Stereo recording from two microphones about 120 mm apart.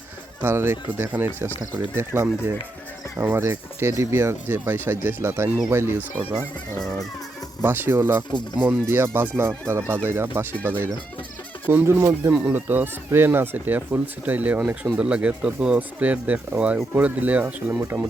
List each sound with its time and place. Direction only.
0.4 s speech: 20° right (ahead or behind)
6.7 s music: 5° left (ahead or behind)
7.6 s speech: 20° right (ahead or behind)